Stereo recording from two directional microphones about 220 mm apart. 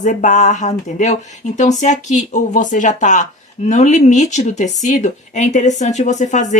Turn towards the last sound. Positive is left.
turn(degrees=35)  # may be behind; listen again after turning